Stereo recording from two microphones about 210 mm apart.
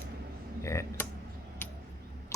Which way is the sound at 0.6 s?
15° left (ahead or behind).